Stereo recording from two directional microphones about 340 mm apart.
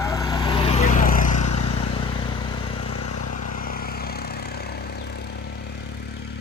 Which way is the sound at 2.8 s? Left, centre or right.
Left.